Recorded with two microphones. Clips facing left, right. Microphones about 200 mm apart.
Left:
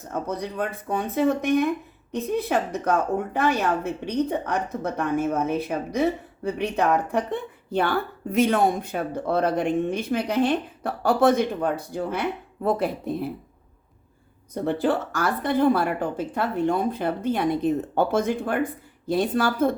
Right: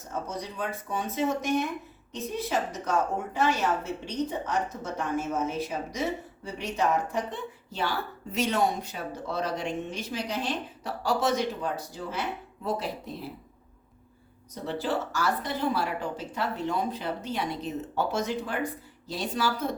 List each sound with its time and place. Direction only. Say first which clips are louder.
0.1 s a woman's voice: left 6 dB; 55° left (ahead or behind)
14.5 s speech: left 7 dB; 55° left (ahead or behind)